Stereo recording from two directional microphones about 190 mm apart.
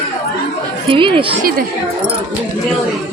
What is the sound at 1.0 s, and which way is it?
Speech, 25° right (ahead or behind).